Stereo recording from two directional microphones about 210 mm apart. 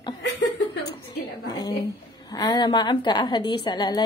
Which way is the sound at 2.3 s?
20° left (ahead or behind).